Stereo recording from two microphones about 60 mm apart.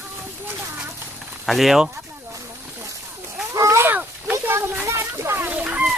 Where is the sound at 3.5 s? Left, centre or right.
Right.